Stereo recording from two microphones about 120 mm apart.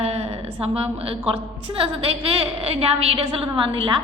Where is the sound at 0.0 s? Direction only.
55° right (ahead or behind).